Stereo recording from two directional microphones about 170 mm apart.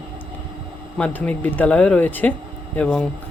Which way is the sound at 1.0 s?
10° left (ahead or behind).